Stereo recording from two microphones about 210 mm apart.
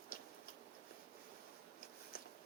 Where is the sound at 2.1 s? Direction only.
45° left (ahead or behind).